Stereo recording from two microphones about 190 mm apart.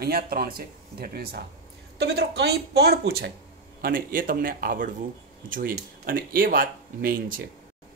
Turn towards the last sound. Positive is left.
turn(degrees=-50)  # may be behind; listen again after turning